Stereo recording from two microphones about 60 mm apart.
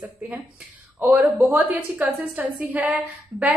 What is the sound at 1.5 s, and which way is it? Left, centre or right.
A woman's voice, right.